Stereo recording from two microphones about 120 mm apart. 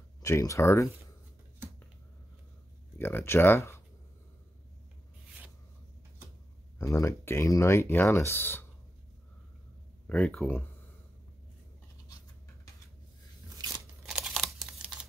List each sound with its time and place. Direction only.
0.2 s speech: 25° left (ahead or behind)
3.0 s speech: 20° left (ahead or behind)
6.8 s speech: 25° left (ahead or behind)
10.0 s speech: 10° left (ahead or behind)
13.6 s crunch: 35° right (ahead or behind)
14.0 s crumpling: 5° right (ahead or behind)